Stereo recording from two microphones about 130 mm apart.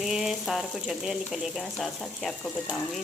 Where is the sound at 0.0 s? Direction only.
5° right (ahead or behind).